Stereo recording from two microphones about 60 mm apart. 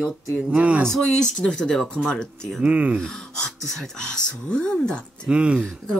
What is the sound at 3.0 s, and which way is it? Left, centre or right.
Speech, centre.